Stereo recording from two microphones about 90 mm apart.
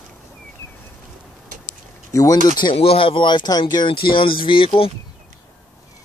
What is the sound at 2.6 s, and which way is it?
Speech, 90° left.